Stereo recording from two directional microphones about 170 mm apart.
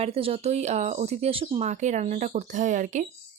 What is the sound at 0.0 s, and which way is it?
Speech, 35° right (ahead or behind).